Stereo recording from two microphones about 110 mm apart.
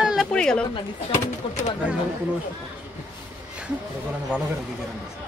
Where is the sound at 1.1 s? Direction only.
90° left.